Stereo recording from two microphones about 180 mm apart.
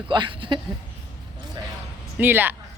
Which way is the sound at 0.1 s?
25° right (ahead or behind).